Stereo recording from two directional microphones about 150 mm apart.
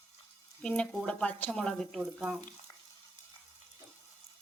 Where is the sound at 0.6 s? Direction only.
5° left (ahead or behind).